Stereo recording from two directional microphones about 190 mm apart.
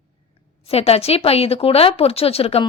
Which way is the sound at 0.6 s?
30° left (ahead or behind).